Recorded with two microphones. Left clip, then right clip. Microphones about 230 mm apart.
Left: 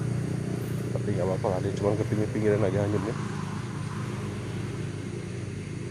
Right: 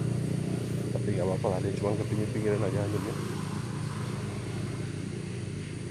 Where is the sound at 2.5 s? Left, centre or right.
Centre.